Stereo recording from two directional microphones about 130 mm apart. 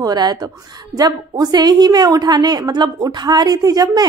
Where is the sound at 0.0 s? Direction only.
30° right (ahead or behind).